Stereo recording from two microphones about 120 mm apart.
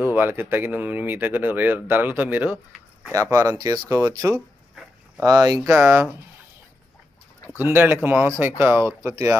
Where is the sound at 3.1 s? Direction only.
30° right (ahead or behind).